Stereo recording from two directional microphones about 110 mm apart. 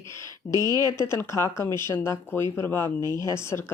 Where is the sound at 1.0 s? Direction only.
25° left (ahead or behind).